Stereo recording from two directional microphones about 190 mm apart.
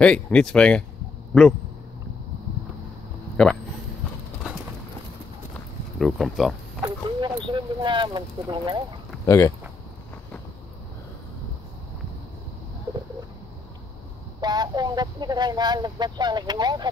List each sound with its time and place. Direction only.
0.0 s speech: 5° left (ahead or behind)
3.4 s speech: 5° left (ahead or behind)
5.9 s speech: centre (ahead or behind)
6.8 s a sound: 20° right (ahead or behind)
9.2 s speech: 15° left (ahead or behind)
14.4 s speech: 20° right (ahead or behind)